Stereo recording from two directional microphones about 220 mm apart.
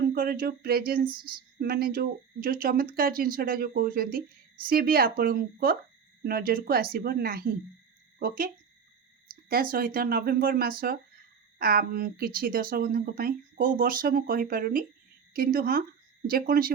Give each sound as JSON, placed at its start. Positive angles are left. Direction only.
{"t": 0.1, "sound": "speech", "side_deg": -40}
{"t": 9.3, "sound": "speech", "side_deg": -40}